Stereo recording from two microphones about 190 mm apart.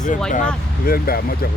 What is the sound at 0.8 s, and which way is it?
Speech, 50° left (ahead or behind).